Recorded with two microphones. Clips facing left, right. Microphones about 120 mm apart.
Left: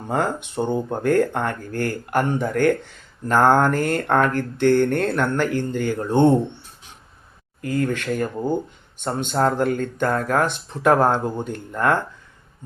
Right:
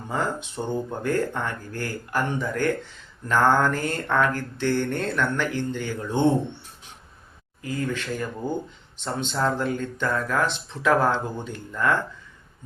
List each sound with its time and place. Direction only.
0.1 s speech: 60° left (ahead or behind)
7.6 s speech: 55° left (ahead or behind)